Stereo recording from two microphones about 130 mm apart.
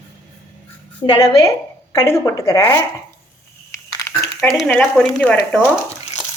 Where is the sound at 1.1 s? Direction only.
25° left (ahead or behind).